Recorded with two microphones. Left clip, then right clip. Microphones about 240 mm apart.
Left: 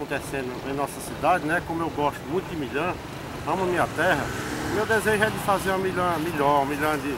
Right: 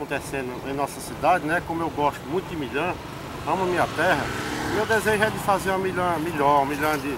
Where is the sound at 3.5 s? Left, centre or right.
Centre.